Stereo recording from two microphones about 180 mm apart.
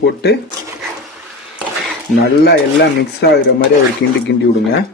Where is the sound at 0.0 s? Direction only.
65° left (ahead or behind).